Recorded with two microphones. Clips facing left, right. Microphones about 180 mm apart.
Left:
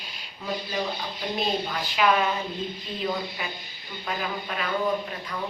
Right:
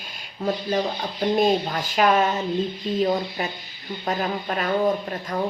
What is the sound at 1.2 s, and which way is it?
A woman's voice, 45° right (ahead or behind).